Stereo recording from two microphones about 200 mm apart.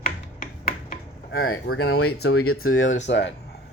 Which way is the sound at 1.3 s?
85° left.